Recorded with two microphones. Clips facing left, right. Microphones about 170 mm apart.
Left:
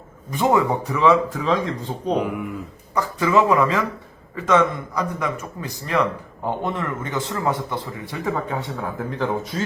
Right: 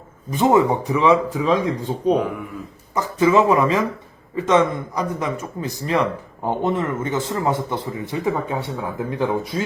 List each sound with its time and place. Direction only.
0.3 s speech: 20° right (ahead or behind)
2.9 s speech: 20° right (ahead or behind)